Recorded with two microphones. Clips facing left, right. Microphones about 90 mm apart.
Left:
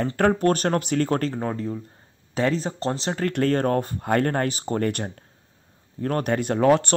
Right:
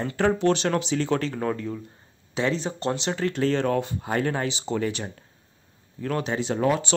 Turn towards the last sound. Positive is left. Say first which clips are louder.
# left 3 dB
turn(degrees=55)  # may be behind; listen again after turning